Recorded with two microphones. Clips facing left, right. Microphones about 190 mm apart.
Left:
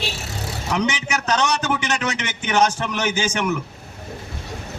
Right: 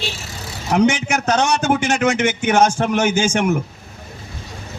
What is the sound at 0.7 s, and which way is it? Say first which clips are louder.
A man's voice: right 8 dB; 50° right (ahead or behind).